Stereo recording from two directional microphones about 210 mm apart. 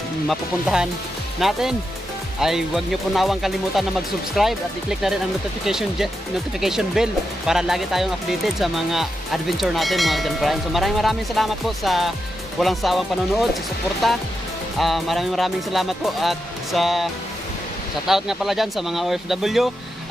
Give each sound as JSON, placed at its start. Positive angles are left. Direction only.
{"t": 0.3, "sound": "speech", "side_deg": 0}
{"t": 5.7, "sound": "speech", "side_deg": 0}